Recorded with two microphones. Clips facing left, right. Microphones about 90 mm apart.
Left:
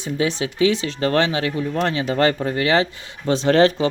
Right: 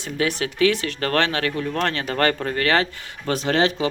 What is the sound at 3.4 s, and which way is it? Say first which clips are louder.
Speech: left 5 dB; 35° left (ahead or behind).